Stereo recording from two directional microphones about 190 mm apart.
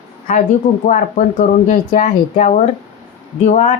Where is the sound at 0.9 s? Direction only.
45° left (ahead or behind).